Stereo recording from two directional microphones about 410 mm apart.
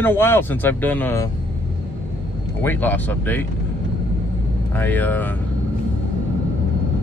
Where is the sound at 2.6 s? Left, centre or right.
Centre.